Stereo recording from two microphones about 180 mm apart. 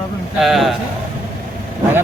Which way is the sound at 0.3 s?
Centre (ahead or behind).